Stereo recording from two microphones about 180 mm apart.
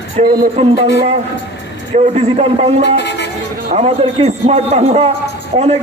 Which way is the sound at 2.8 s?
75° left (ahead or behind).